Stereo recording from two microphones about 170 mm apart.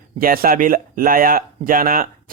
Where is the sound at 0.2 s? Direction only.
60° right (ahead or behind).